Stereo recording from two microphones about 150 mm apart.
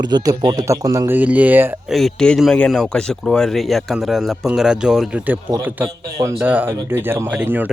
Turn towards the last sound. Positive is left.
turn(degrees=-10)  # may be behind; listen again after turning